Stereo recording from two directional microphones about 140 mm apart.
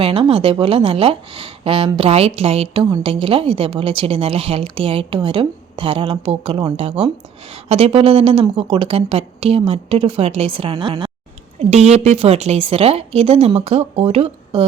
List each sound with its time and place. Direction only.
0.0 s a woman's voice: 40° right (ahead or behind)
11.7 s a woman's voice: 50° right (ahead or behind)